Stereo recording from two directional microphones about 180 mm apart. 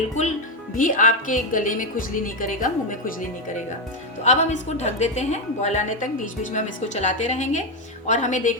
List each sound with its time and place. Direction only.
0.2 s a woman's voice: 40° left (ahead or behind)
4.2 s a woman's voice: 40° left (ahead or behind)